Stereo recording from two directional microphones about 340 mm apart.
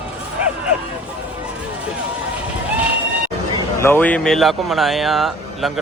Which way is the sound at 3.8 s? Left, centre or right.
Centre.